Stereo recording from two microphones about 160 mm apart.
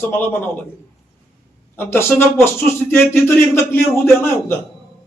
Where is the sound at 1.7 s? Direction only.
15° left (ahead or behind).